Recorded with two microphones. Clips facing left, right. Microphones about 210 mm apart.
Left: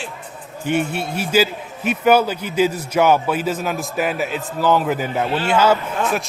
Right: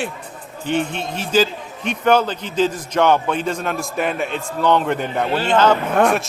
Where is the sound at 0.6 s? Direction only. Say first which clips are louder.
Left 1 dB; 10° left (ahead or behind).